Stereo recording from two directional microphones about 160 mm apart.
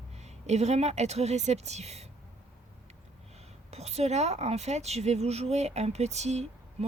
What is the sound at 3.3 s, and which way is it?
A woman's voice, 40° right (ahead or behind).